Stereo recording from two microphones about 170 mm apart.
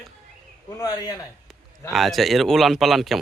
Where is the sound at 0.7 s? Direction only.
20° left (ahead or behind).